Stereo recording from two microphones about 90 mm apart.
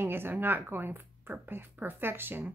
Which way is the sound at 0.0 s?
25° right (ahead or behind).